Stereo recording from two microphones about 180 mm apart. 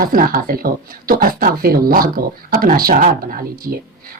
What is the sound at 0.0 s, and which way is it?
Speech, 50° right (ahead or behind).